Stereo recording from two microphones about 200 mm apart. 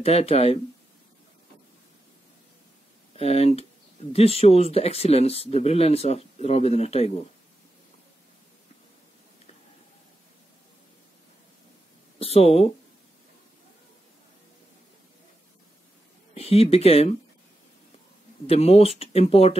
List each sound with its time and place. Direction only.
0.0 s speech: 30° left (ahead or behind)
3.2 s speech: 30° left (ahead or behind)
12.2 s speech: 30° left (ahead or behind)
16.3 s speech: 30° left (ahead or behind)
18.5 s speech: 30° left (ahead or behind)